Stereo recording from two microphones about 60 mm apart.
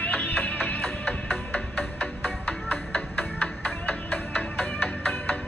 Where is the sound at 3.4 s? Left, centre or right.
Left.